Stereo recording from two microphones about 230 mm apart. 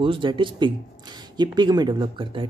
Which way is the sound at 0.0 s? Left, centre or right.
Right.